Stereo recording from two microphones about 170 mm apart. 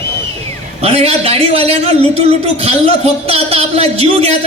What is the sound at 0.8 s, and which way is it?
A man's voice, 35° right (ahead or behind).